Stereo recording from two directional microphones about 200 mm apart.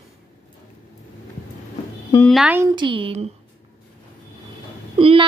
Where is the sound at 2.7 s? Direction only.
25° right (ahead or behind).